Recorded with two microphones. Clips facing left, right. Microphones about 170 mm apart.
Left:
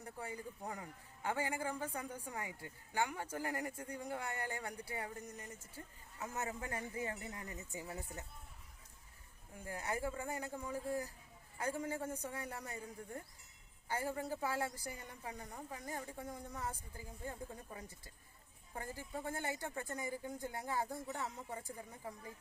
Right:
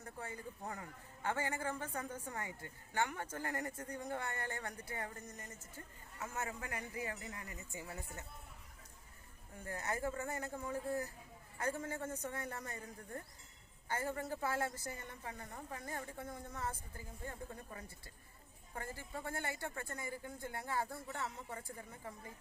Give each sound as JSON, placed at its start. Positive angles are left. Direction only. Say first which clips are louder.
{"t": 0.0, "sound": "a man's voice", "louder": "left 1 dB", "side_deg": 15}
{"t": 9.6, "sound": "a man's voice", "louder": "even", "side_deg": 10}
{"t": 18.7, "sound": "a man's voice", "louder": "left 1 dB", "side_deg": 15}